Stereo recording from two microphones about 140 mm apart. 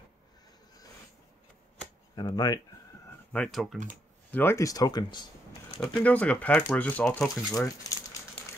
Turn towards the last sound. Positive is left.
turn(degrees=25)  # may be behind; listen again after turning